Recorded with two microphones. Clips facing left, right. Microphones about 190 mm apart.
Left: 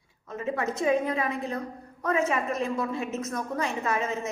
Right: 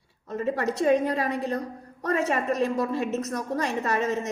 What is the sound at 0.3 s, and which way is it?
A woman's voice, 40° right (ahead or behind).